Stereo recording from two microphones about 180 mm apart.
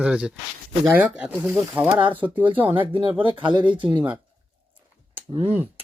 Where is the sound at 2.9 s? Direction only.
30° right (ahead or behind).